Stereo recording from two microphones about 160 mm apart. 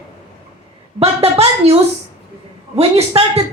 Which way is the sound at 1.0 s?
40° right (ahead or behind).